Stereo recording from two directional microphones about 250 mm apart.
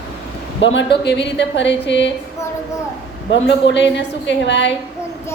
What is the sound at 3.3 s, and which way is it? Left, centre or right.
A woman's voice, left.